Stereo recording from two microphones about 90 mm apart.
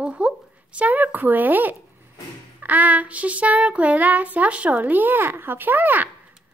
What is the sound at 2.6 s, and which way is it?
Child singing, 20° right (ahead or behind).